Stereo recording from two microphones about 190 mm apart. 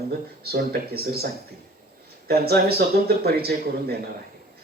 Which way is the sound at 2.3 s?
55° right (ahead or behind).